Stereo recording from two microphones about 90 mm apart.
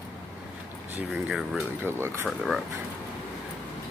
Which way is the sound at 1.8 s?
25° right (ahead or behind).